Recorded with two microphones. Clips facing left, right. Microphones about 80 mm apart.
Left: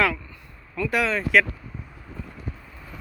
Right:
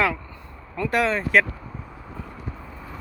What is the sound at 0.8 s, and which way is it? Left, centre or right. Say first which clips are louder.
Speech: right 2 dB; right.